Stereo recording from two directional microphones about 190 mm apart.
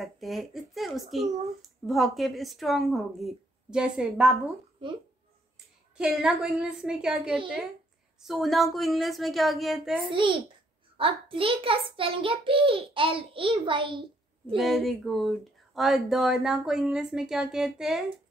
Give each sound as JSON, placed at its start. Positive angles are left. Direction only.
{"t": 0.0, "sound": "speech", "side_deg": 0}
{"t": 5.9, "sound": "speech", "side_deg": -5}
{"t": 10.1, "sound": "a child's voice", "side_deg": -25}
{"t": 14.6, "sound": "speech", "side_deg": 0}